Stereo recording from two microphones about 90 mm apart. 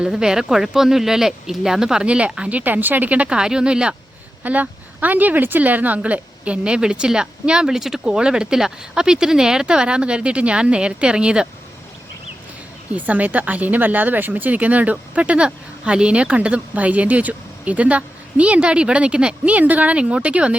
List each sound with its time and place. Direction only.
0.0 s speech: 10° right (ahead or behind)
13.0 s speech: 20° right (ahead or behind)